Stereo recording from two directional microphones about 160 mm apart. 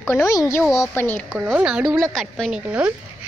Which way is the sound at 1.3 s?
10° right (ahead or behind).